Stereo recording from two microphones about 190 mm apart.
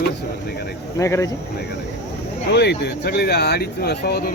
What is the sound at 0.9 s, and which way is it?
Speech, 15° left (ahead or behind).